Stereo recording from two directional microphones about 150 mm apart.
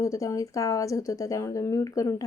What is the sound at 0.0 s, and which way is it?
A woman's voice, 20° left (ahead or behind).